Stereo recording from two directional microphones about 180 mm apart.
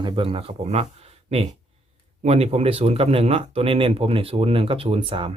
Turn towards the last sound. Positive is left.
turn(degrees=-30)  # may be behind; listen again after turning